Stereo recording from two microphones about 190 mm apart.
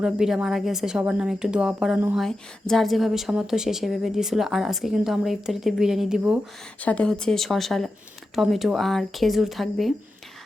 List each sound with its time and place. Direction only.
0.0 s a woman's voice: 5° right (ahead or behind)
6.8 s a woman's voice: 5° left (ahead or behind)